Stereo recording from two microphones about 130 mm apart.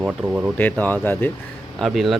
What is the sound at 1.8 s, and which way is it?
Speech, centre (ahead or behind).